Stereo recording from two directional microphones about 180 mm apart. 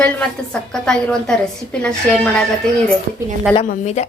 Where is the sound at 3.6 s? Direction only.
40° left (ahead or behind).